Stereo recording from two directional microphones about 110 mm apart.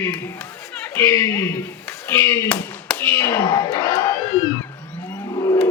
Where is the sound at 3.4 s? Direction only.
40° left (ahead or behind).